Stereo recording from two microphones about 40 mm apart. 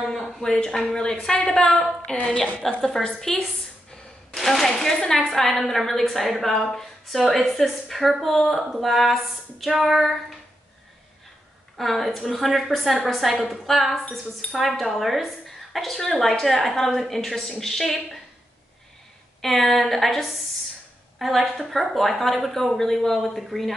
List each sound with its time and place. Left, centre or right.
0.0 s a sound: centre
0.4 s a woman's voice: centre
2.1 s a woman's voice: left
3.0 s a woman's voice: centre
4.4 s a woman's voice: centre
11.7 s a woman's voice: centre
19.4 s a woman's voice: centre